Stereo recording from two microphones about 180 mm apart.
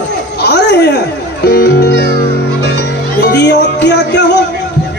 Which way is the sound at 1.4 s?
65° left (ahead or behind).